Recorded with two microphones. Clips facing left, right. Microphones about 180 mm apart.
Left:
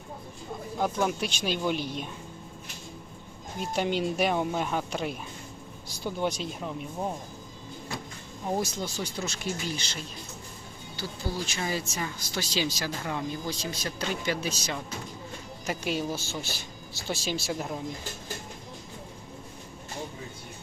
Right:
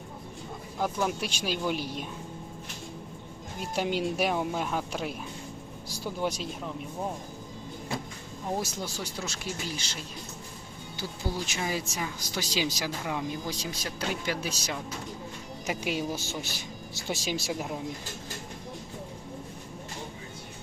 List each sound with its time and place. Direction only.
0.8 s speech: 5° right (ahead or behind)
3.8 s speech: 5° right (ahead or behind)
8.4 s speech: 5° right (ahead or behind)
11.3 s speech: 20° right (ahead or behind)